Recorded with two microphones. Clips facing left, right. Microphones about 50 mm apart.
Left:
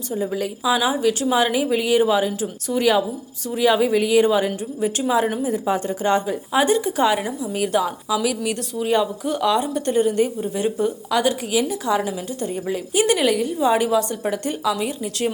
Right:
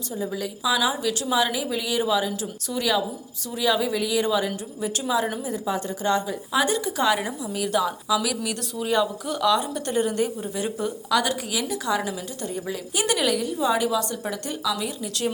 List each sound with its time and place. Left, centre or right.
0.6 s speech: left
2.4 s speech: left
3.6 s speech: left; by 7.3 s centre
7.7 s a woman's voice: left; by 10.2 s centre
10.5 s a woman's voice: centre; by 14.8 s left